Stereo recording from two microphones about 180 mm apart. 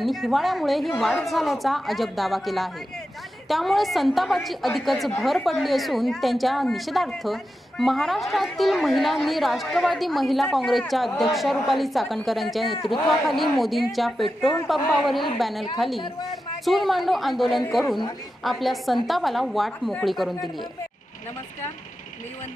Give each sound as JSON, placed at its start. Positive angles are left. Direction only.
{"t": 0.0, "sound": "a woman's voice", "side_deg": 0}
{"t": 16.6, "sound": "a woman's voice", "side_deg": 0}
{"t": 17.8, "sound": "a man's voice", "side_deg": 25}
{"t": 18.4, "sound": "a woman's voice", "side_deg": 0}